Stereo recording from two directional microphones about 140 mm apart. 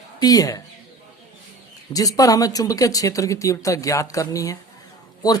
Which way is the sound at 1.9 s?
25° left (ahead or behind).